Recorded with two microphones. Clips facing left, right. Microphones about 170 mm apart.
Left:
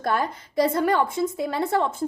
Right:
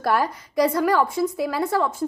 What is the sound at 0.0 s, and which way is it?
A woman's voice, 25° left (ahead or behind).